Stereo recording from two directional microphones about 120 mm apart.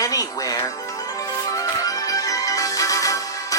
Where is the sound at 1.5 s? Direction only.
30° left (ahead or behind).